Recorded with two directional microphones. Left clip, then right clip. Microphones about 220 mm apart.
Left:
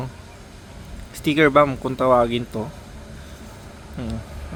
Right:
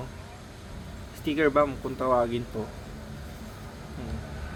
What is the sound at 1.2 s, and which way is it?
Speech, 50° left (ahead or behind).